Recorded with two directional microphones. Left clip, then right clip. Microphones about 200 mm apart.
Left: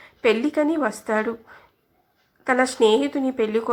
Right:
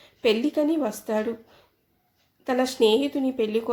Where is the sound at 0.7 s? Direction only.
Centre (ahead or behind).